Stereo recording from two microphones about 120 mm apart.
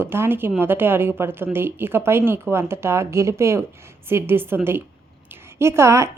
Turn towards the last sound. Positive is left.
turn(degrees=-25)  # may be behind; listen again after turning